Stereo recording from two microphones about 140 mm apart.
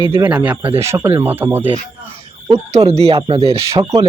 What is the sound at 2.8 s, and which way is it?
Speech, 45° right (ahead or behind).